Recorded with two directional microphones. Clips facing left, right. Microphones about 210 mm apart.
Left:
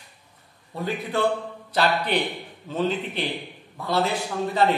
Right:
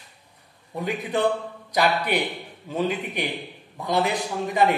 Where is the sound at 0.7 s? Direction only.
15° right (ahead or behind).